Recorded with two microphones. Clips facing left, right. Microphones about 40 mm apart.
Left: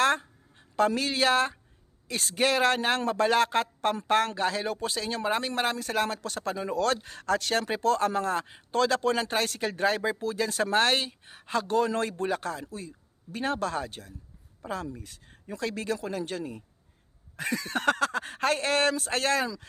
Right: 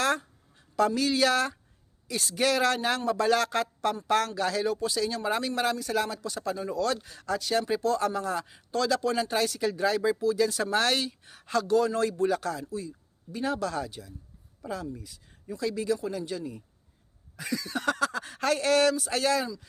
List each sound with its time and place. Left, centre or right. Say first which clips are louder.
0.0 s a sound: left 3 dB; left
2.0 s speech: even; left
7.7 s speech: left 4 dB; left